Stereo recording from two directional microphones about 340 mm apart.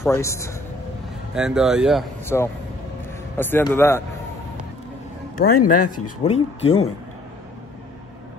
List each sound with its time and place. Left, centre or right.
0.0 s a man's voice: centre
1.3 s a man's voice: centre
5.6 s speech: left
6.2 s a man's voice: centre